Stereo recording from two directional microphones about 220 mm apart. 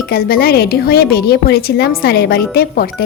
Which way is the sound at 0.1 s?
45° left (ahead or behind).